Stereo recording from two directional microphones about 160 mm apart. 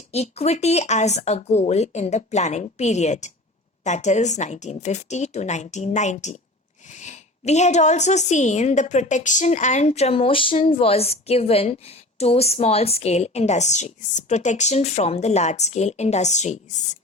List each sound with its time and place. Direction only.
0.1 s a woman's voice: 40° left (ahead or behind)